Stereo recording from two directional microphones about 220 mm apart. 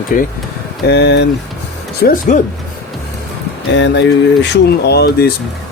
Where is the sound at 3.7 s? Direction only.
55° left (ahead or behind).